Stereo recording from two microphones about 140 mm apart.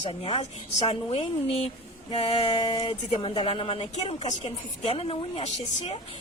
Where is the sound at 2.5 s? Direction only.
35° left (ahead or behind).